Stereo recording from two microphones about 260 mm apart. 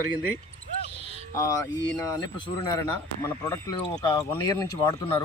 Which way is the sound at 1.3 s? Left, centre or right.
Centre.